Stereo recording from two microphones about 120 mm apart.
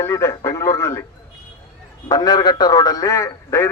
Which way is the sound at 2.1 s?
35° left (ahead or behind).